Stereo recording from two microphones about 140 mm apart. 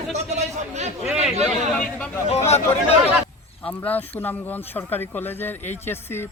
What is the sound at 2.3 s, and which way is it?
Speech, 50° left (ahead or behind).